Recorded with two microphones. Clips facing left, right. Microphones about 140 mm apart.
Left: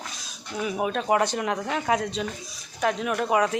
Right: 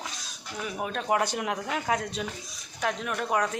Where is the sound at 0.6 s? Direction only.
10° left (ahead or behind).